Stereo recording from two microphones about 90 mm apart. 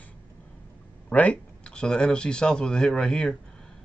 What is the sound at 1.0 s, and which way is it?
Speech, 15° left (ahead or behind).